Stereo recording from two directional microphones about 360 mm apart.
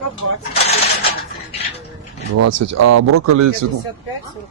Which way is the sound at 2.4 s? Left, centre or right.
Right.